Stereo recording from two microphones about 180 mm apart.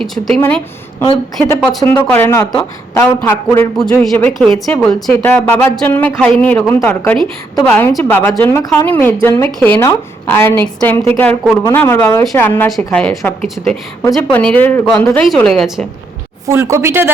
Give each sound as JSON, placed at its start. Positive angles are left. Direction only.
{"t": 0.3, "sound": "a man's voice", "side_deg": 10}
{"t": 16.5, "sound": "speech", "side_deg": -15}